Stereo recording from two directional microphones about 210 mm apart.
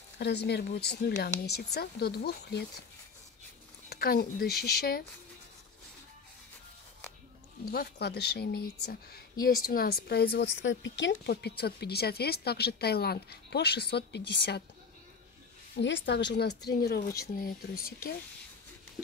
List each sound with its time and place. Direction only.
0.2 s a woman's voice: 50° left (ahead or behind)
3.9 s a woman's voice: 45° left (ahead or behind)
7.7 s a woman's voice: 50° left (ahead or behind)
15.8 s a woman's voice: 55° left (ahead or behind)